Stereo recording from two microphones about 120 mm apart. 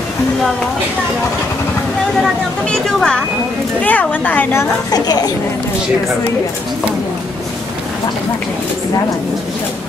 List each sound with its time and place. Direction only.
2.6 s a woman's voice: 5° left (ahead or behind)
4.9 s a woman's voice: 35° left (ahead or behind)